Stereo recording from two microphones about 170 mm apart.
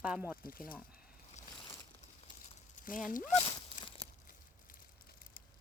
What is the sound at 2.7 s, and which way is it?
Speech, 50° left (ahead or behind).